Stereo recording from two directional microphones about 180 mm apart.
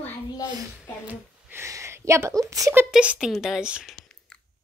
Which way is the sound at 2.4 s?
20° right (ahead or behind).